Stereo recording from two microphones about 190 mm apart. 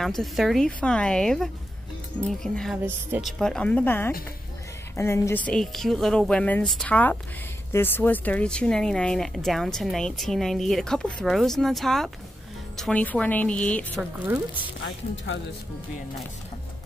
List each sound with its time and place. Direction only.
0.0 s a woman's voice: centre (ahead or behind)
14.2 s speech: 10° right (ahead or behind)
14.8 s speech: 65° left (ahead or behind)